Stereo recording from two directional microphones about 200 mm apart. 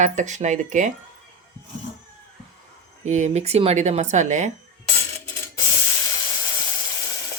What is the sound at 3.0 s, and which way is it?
Speech, 35° right (ahead or behind).